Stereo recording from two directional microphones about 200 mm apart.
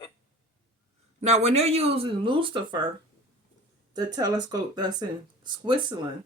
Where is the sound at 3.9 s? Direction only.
20° right (ahead or behind).